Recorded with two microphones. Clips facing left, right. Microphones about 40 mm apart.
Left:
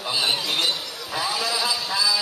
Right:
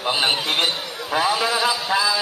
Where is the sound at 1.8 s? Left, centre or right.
Right.